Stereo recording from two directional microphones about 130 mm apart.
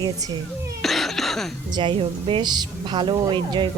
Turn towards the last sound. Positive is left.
turn(degrees=-35)  # may be behind; listen again after turning